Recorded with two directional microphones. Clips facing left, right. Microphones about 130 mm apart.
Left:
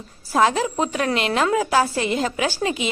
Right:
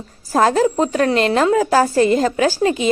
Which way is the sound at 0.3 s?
40° right (ahead or behind).